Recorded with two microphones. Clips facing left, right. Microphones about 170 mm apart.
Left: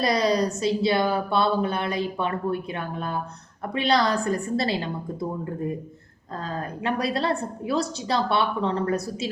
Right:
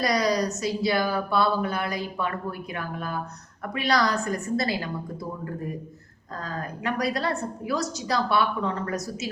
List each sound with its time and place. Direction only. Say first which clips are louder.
0.0 s speech: left 2 dB; 25° left (ahead or behind)
6.4 s speech: left 2 dB; 30° left (ahead or behind)